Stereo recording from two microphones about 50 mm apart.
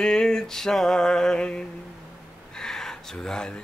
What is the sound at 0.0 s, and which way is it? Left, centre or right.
Music, centre.